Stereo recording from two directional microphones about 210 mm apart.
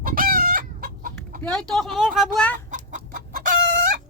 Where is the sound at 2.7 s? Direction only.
40° right (ahead or behind).